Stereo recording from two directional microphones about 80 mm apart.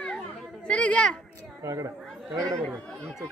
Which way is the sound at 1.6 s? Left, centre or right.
Right.